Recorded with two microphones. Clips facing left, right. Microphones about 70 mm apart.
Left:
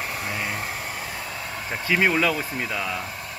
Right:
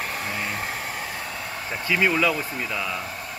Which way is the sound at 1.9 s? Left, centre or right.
Left.